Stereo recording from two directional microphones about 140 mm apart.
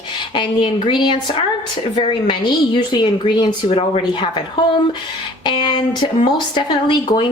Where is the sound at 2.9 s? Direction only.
30° left (ahead or behind).